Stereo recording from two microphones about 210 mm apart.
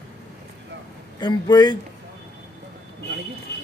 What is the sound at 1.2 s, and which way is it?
Speech, 20° left (ahead or behind).